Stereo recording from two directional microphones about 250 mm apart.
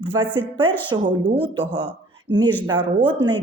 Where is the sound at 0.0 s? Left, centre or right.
Centre.